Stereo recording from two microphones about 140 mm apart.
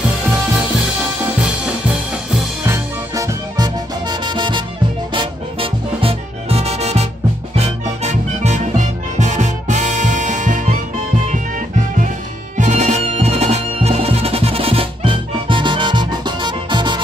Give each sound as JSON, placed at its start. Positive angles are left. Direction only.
{"t": 2.6, "sound": "music", "side_deg": -15}
{"t": 3.5, "sound": "music", "side_deg": -30}
{"t": 12.5, "sound": "music", "side_deg": -55}